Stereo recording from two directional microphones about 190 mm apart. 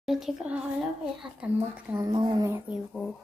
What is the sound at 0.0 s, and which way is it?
A child's voice, centre (ahead or behind).